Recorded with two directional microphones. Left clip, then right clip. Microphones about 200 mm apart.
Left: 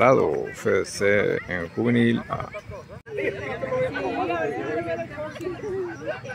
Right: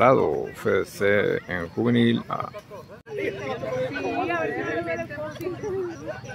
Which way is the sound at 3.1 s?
25° left (ahead or behind).